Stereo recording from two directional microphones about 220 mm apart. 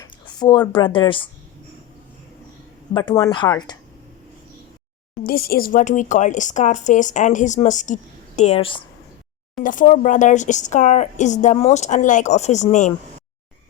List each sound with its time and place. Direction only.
0.3 s a sound: 20° left (ahead or behind)
0.7 s speech: 20° left (ahead or behind)
2.9 s speech: 20° left (ahead or behind)
5.1 s speech: 45° left (ahead or behind); by 8.8 s 25° left (ahead or behind)
9.6 s speech: 35° left (ahead or behind)